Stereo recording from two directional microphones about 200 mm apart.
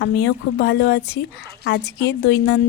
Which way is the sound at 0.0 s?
60° left (ahead or behind).